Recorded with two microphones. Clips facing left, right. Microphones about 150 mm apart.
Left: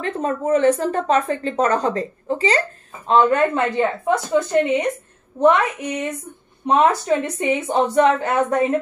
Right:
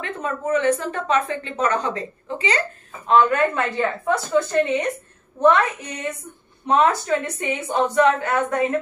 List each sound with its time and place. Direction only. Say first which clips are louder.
0.0 s a woman's voice: left 4 dB; 35° left (ahead or behind)